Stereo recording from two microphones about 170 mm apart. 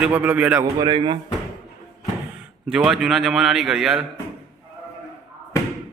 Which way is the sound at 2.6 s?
5° right (ahead or behind).